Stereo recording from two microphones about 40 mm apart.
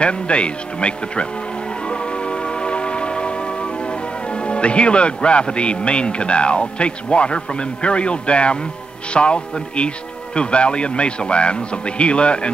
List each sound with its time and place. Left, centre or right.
0.0 s speech: left
1.9 s music: left
9.1 s speech: left